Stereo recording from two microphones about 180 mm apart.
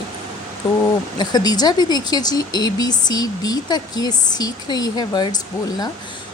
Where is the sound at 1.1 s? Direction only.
25° left (ahead or behind).